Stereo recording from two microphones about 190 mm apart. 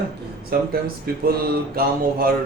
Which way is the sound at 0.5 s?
55° right (ahead or behind).